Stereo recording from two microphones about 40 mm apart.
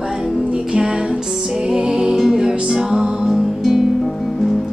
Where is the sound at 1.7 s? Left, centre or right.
Centre.